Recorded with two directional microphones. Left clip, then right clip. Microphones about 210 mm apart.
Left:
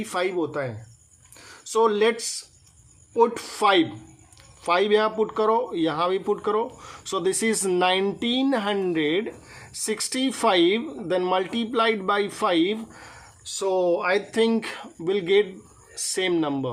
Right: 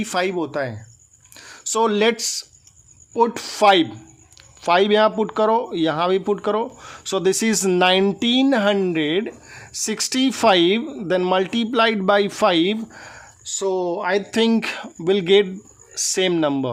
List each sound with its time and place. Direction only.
0.0 s speech: 45° right (ahead or behind)
13.4 s speech: 25° right (ahead or behind)